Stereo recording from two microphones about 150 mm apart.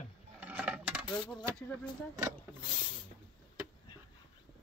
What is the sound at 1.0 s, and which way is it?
Speech, 30° left (ahead or behind).